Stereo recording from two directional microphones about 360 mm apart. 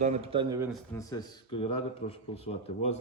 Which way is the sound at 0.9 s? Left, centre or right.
Centre.